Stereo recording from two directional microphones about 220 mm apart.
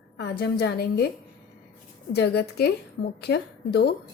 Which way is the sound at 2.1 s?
50° left (ahead or behind).